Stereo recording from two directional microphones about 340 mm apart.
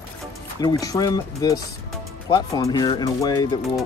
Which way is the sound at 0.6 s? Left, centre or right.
Centre.